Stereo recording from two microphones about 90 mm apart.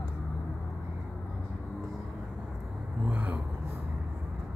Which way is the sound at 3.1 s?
15° right (ahead or behind).